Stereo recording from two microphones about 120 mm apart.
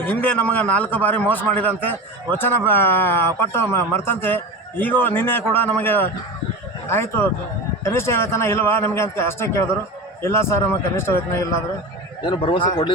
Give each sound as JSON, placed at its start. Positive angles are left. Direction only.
{"t": 0.0, "sound": "speech", "side_deg": 15}
{"t": 7.9, "sound": "a man's voice", "side_deg": 20}
{"t": 12.2, "sound": "speech", "side_deg": 40}